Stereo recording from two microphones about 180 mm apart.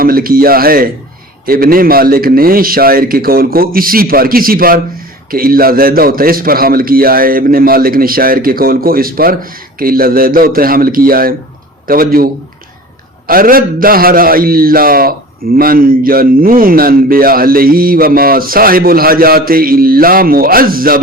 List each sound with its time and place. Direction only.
0.0 s a man's voice: 55° right (ahead or behind)